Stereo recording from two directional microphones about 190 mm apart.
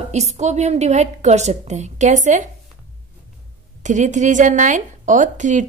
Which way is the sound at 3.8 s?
40° right (ahead or behind).